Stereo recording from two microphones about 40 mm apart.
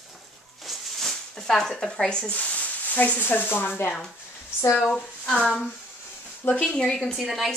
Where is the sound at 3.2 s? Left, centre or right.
Left.